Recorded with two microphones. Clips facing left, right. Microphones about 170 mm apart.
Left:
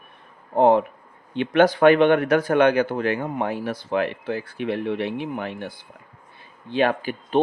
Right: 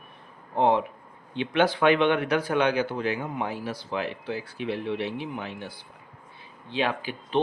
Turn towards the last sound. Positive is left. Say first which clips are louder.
# left 5 dB
turn(degrees=50)  # may be behind; listen again after turning